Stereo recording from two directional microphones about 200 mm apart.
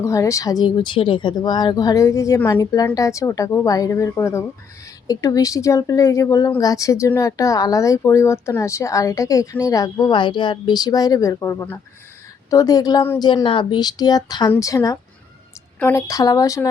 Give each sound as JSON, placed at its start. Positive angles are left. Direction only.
{"t": 0.0, "sound": "a woman's voice", "side_deg": 15}